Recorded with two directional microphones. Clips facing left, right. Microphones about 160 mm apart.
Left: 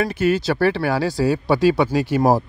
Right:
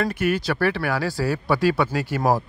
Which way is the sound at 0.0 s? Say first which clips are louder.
Left 4 dB; 25° left (ahead or behind).